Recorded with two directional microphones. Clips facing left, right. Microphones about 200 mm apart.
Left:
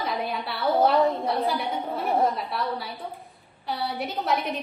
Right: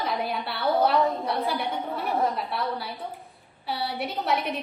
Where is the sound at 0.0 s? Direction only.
Centre (ahead or behind).